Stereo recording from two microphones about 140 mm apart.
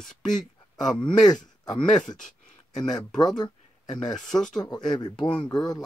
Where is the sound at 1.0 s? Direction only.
30° left (ahead or behind).